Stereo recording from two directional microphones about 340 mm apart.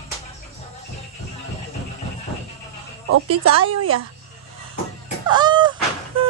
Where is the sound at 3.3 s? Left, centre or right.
Centre.